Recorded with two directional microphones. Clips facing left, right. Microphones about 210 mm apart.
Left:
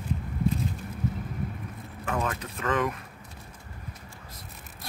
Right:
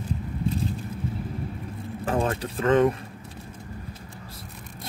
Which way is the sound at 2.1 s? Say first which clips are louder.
Right 5 dB; 30° right (ahead or behind).